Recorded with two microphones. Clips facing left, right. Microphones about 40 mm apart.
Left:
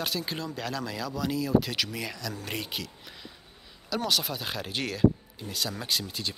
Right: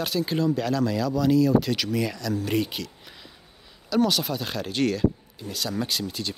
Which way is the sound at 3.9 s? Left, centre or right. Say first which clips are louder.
Right 6 dB; centre.